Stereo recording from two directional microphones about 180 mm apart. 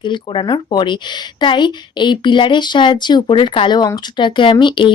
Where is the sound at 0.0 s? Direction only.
25° left (ahead or behind).